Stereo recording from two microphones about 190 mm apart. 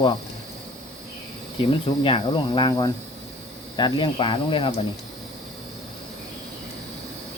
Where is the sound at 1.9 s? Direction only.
25° left (ahead or behind).